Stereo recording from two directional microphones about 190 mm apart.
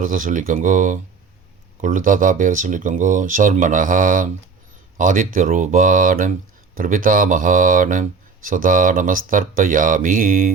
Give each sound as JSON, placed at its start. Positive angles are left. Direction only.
{"t": 0.0, "sound": "speech", "side_deg": -45}